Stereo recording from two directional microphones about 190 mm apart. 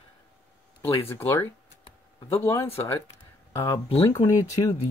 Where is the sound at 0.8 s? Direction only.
10° left (ahead or behind).